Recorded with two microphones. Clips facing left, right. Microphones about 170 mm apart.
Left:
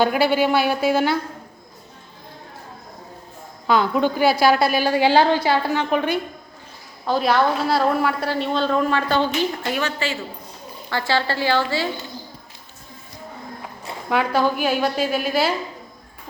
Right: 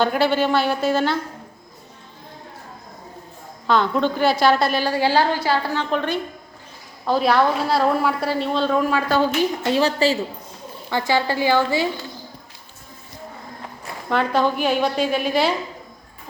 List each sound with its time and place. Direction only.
0.0 s a woman's voice: 10° left (ahead or behind)
3.7 s a woman's voice: 10° left (ahead or behind)
7.0 s a woman's voice: centre (ahead or behind)
9.6 s a woman's voice: 30° right (ahead or behind)
10.8 s speech: 15° right (ahead or behind)
14.1 s a woman's voice: 5° left (ahead or behind)